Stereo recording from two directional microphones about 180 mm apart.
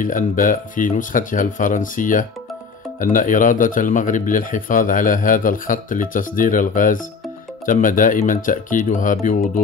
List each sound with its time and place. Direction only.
0.0 s a man's voice: 50° left (ahead or behind)